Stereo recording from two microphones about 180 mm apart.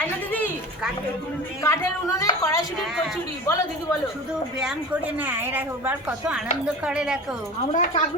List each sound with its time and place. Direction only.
0.0 s a sound: 10° left (ahead or behind)
1.6 s speech: 15° left (ahead or behind)
5.1 s a woman's voice: 10° right (ahead or behind)
7.7 s speech: 45° left (ahead or behind)